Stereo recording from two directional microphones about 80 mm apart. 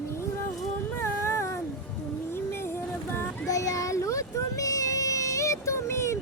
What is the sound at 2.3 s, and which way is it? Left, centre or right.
Music, left.